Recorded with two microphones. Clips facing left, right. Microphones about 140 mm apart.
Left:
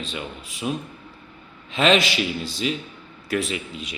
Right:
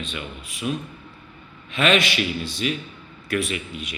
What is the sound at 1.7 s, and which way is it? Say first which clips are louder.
A man's voice: left 1 dB; 25° left (ahead or behind).